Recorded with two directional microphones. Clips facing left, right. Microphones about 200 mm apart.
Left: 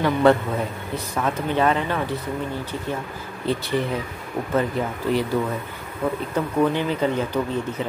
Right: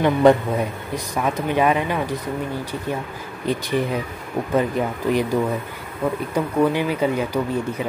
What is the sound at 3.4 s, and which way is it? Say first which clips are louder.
Speech: right 1 dB; 15° right (ahead or behind).